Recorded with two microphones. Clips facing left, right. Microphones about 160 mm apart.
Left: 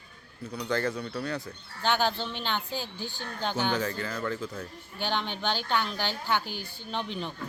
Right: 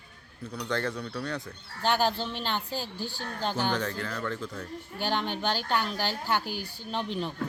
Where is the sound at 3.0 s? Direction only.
35° right (ahead or behind).